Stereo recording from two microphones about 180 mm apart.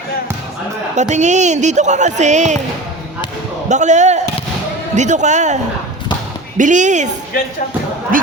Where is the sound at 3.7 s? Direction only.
40° right (ahead or behind).